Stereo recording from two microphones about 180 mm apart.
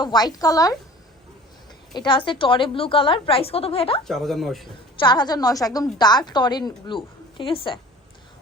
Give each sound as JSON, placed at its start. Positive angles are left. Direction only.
{"t": 0.0, "sound": "a woman's voice", "side_deg": 25}
{"t": 1.9, "sound": "a woman's voice", "side_deg": 25}
{"t": 4.0, "sound": "speech", "side_deg": 0}
{"t": 4.9, "sound": "a woman's voice", "side_deg": 25}